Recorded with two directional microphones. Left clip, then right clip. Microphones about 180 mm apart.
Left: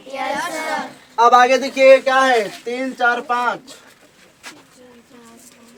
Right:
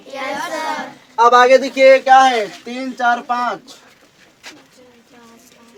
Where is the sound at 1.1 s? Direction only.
30° left (ahead or behind).